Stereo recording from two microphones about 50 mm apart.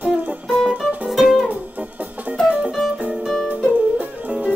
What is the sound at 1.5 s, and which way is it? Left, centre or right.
Music, right.